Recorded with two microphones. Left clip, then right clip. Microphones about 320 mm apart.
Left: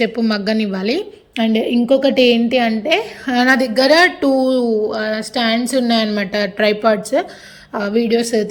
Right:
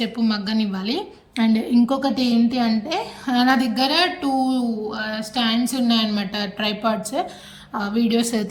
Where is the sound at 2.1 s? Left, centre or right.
Centre.